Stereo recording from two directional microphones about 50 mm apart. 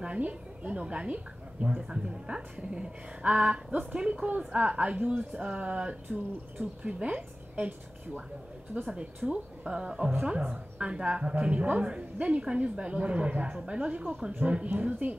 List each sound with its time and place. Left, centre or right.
0.0 s a woman's voice: right